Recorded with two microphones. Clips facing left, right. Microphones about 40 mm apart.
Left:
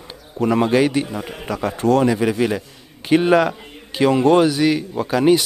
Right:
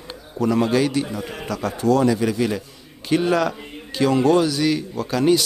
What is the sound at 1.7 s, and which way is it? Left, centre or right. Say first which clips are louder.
Speech: left 2 dB; left.